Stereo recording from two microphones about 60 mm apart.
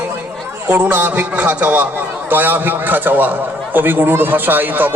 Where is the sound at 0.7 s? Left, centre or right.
Right.